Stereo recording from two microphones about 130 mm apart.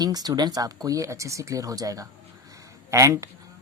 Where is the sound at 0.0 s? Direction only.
30° right (ahead or behind).